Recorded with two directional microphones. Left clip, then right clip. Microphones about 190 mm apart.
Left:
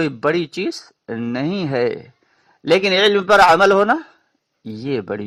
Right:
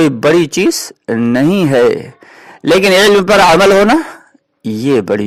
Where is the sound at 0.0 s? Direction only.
35° right (ahead or behind).